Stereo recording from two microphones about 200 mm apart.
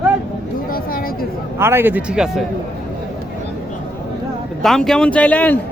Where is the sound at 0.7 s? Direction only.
45° left (ahead or behind).